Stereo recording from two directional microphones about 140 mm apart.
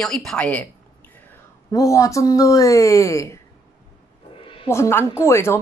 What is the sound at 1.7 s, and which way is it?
Speech, 25° left (ahead or behind).